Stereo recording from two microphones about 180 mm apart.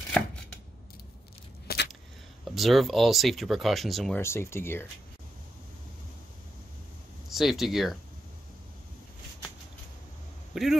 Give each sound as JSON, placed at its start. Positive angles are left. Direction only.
{"t": 1.7, "sound": "a sound", "side_deg": 55}
{"t": 2.4, "sound": "speech", "side_deg": 0}
{"t": 4.2, "sound": "speech", "side_deg": 15}
{"t": 7.2, "sound": "speech", "side_deg": 0}
{"t": 10.5, "sound": "speech", "side_deg": 0}